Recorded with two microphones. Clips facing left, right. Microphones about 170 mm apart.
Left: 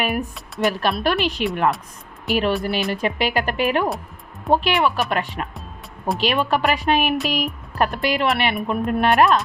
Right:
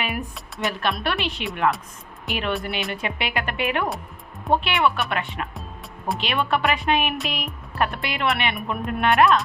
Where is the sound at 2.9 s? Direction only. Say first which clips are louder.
Left 6 dB; 35° left (ahead or behind).